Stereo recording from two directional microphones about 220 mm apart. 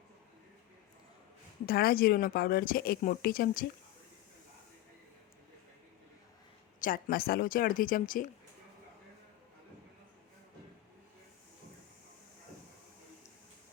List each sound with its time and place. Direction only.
1.6 s speech: 45° left (ahead or behind)
6.7 s speech: 40° left (ahead or behind)